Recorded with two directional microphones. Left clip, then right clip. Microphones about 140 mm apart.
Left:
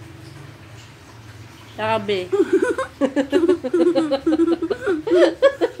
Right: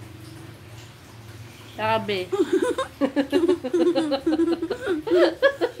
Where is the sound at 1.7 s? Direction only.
10° left (ahead or behind).